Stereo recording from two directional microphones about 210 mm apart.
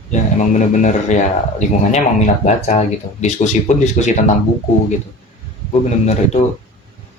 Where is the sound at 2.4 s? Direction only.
35° left (ahead or behind).